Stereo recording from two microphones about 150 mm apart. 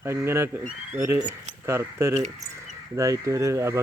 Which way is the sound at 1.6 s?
15° right (ahead or behind).